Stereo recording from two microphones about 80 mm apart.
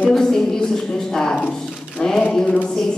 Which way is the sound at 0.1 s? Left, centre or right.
Centre.